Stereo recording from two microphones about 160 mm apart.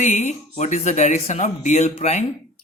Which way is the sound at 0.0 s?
45° left (ahead or behind).